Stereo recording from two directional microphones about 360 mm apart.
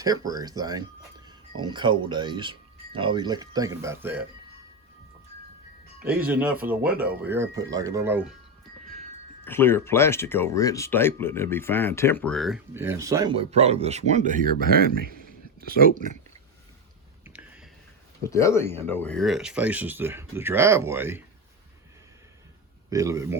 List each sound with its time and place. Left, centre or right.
0.0 s speech: centre
6.2 s speech: centre
9.4 s speech: centre; by 16.1 s right
17.2 s a sound: centre
18.2 s speech: centre
22.9 s speech: centre